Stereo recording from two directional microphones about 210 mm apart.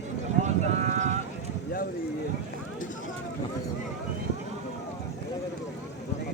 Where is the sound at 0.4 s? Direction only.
35° right (ahead or behind).